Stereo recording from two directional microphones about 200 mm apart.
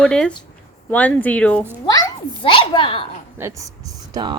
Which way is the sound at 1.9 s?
20° left (ahead or behind).